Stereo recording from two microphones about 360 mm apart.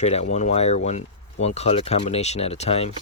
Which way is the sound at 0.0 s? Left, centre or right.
Centre.